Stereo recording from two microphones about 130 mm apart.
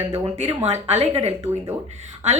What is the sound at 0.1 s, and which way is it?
Speech, 55° right (ahead or behind).